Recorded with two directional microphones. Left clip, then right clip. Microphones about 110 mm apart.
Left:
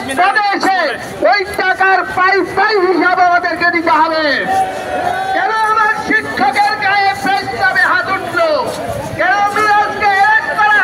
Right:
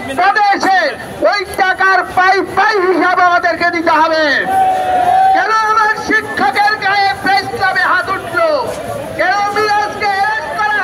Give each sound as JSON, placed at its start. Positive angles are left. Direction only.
{"t": 0.2, "sound": "a man's voice", "side_deg": -55}
{"t": 5.3, "sound": "music", "side_deg": -25}
{"t": 9.2, "sound": "a sound", "side_deg": -20}